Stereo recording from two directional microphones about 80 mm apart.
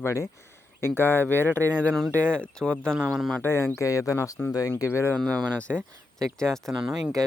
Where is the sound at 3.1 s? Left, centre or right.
Centre.